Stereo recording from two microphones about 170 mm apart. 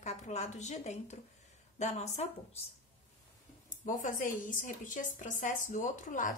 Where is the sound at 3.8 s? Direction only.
50° left (ahead or behind).